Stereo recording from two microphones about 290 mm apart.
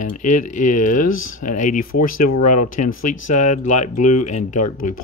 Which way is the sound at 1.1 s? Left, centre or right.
Left.